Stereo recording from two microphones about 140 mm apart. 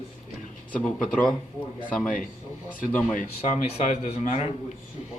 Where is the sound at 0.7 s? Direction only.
10° left (ahead or behind).